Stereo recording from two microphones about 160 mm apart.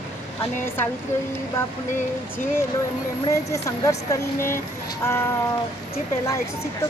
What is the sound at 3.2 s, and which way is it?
Speech, 20° left (ahead or behind).